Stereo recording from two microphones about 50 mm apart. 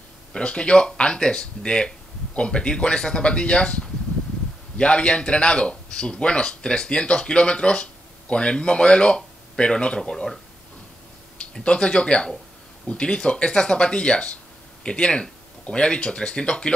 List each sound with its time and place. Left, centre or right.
0.3 s speech: centre
11.6 s speech: centre